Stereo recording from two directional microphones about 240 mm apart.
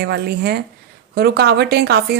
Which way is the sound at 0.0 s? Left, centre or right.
Right.